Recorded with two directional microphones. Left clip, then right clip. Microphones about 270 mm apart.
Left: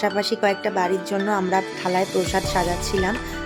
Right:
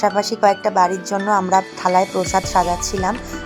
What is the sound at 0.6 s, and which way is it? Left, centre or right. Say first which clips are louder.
Speech: right 6 dB; centre.